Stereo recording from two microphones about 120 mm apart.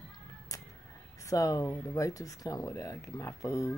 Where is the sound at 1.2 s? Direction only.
25° left (ahead or behind).